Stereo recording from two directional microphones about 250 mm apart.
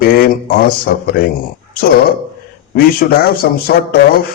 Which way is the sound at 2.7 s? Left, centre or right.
Left.